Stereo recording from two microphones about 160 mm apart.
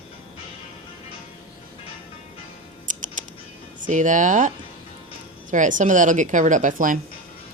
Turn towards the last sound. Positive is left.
turn(degrees=-55)  # may be behind; listen again after turning